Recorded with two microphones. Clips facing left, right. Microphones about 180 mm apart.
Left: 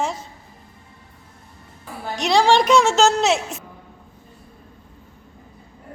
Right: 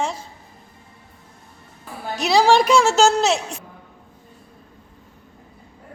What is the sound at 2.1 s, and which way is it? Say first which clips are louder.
A woman's voice: right 1 dB; 5° right (ahead or behind).